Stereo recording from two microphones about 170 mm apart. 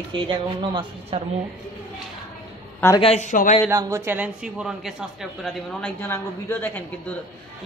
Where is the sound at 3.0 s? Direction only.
40° left (ahead or behind).